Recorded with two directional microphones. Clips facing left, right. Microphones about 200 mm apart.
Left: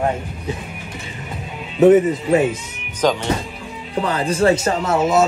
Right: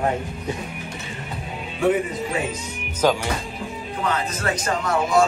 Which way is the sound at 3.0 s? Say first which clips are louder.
Left 2 dB; 10° right (ahead or behind).